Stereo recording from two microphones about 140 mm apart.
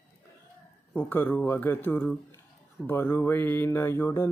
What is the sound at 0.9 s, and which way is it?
Mantra, 10° left (ahead or behind).